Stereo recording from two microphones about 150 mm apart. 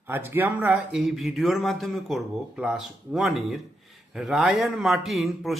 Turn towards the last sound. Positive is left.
turn(degrees=0)  # may be behind; listen again after turning